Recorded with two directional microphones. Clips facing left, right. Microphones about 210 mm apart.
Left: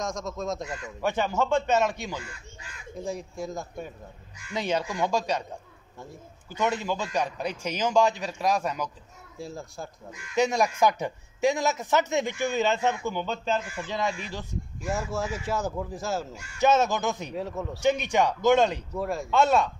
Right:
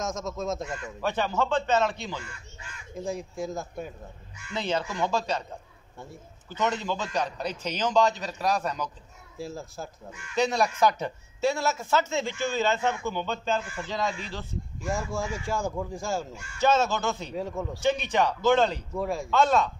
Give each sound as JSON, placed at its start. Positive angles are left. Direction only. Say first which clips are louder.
{"t": 0.0, "sound": "a man's voice", "louder": "even", "side_deg": 0}
{"t": 1.0, "sound": "speech", "louder": "left 1 dB", "side_deg": 15}
{"t": 3.0, "sound": "a man's voice", "louder": "right 1 dB", "side_deg": 0}
{"t": 4.5, "sound": "speech", "louder": "left 1 dB", "side_deg": 15}
{"t": 6.5, "sound": "speech", "louder": "left 1 dB", "side_deg": 10}
{"t": 9.4, "sound": "a man's voice", "louder": "right 1 dB", "side_deg": 0}
{"t": 10.3, "sound": "speech", "louder": "left 1 dB", "side_deg": 15}
{"t": 14.9, "sound": "a man's voice", "louder": "left 1 dB", "side_deg": 5}
{"t": 16.5, "sound": "speech", "louder": "left 1 dB", "side_deg": 15}
{"t": 17.4, "sound": "a man's voice", "louder": "even", "side_deg": 0}
{"t": 17.8, "sound": "speech", "louder": "left 2 dB", "side_deg": 15}
{"t": 18.9, "sound": "a man's voice", "louder": "right 1 dB", "side_deg": 0}
{"t": 19.3, "sound": "speech", "louder": "left 1 dB", "side_deg": 10}